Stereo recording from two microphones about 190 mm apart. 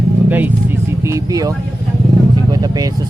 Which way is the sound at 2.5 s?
20° right (ahead or behind).